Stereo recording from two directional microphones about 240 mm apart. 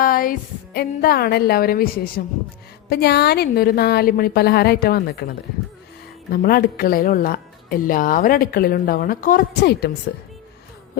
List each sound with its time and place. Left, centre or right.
0.0 s speech: left
6.3 s speech: left